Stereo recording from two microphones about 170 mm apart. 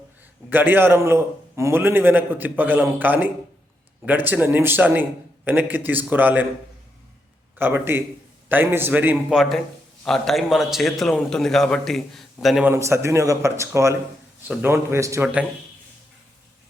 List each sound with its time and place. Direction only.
0.5 s a man's voice: 10° right (ahead or behind)
7.6 s a man's voice: 15° right (ahead or behind)
12.6 s a man's voice: 15° right (ahead or behind)